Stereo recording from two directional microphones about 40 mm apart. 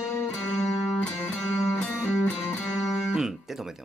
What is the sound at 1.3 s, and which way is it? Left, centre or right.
Music, left.